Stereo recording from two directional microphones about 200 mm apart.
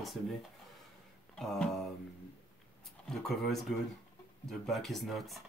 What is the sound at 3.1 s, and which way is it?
Speech, centre (ahead or behind).